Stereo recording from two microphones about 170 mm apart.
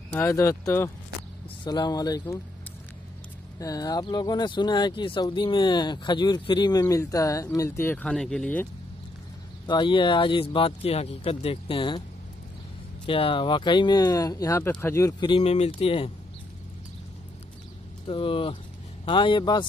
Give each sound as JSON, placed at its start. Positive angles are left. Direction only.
{"t": 0.1, "sound": "speech", "side_deg": 15}
{"t": 3.5, "sound": "speech", "side_deg": 20}
{"t": 9.7, "sound": "speech", "side_deg": 30}
{"t": 13.0, "sound": "speech", "side_deg": 30}
{"t": 15.2, "sound": "speech", "side_deg": 35}
{"t": 18.0, "sound": "speech", "side_deg": 30}